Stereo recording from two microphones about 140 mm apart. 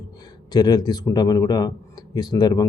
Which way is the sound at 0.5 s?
30° left (ahead or behind).